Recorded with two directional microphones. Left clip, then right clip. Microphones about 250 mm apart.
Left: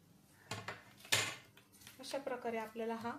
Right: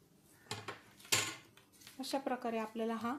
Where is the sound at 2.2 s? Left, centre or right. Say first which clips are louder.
Even; right.